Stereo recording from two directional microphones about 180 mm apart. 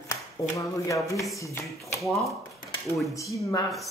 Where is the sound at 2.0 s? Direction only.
Centre (ahead or behind).